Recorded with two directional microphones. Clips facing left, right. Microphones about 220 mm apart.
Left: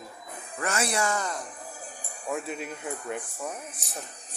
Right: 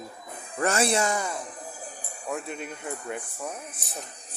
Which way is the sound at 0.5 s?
35° right (ahead or behind).